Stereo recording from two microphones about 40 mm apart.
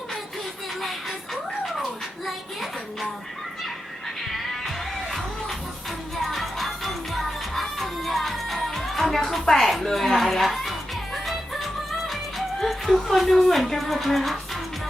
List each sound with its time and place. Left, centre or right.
0.8 s music: centre
6.2 s music: centre
9.5 s a woman's voice: centre
9.8 s music: centre